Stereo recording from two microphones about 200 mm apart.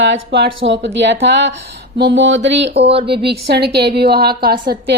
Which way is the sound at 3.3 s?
55° right (ahead or behind).